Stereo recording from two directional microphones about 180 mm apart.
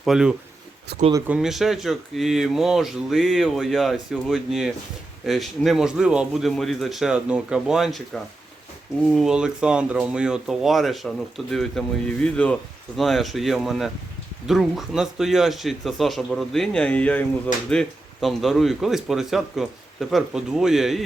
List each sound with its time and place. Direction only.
0.0 s speech: 5° right (ahead or behind)
0.9 s speech: 65° right (ahead or behind)
1.3 s speech: centre (ahead or behind)